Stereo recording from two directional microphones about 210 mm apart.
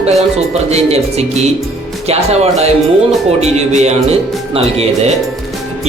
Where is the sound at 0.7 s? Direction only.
30° right (ahead or behind).